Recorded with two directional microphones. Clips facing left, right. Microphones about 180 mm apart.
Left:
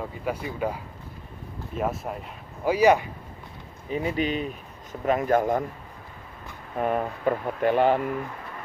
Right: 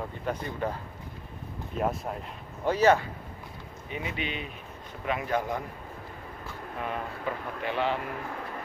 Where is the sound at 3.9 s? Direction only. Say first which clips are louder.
Left 9 dB; 35° left (ahead or behind).